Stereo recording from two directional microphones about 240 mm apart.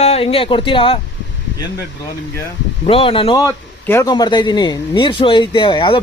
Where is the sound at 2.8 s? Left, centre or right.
Left.